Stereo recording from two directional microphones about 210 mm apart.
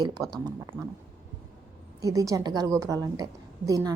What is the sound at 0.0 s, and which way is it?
Speech, 20° right (ahead or behind).